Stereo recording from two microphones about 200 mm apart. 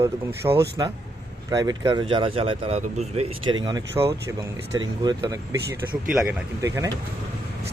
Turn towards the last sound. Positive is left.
turn(degrees=-15)  # may be behind; listen again after turning